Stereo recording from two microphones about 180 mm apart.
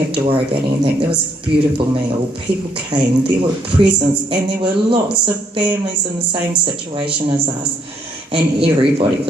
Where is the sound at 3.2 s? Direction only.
30° right (ahead or behind).